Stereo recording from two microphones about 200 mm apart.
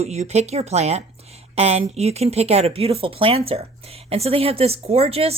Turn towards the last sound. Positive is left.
turn(degrees=-30)  # may be behind; listen again after turning